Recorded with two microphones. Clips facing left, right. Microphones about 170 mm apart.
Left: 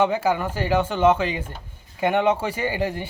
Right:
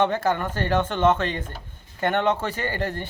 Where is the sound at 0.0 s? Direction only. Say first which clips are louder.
Left 1 dB; 10° left (ahead or behind).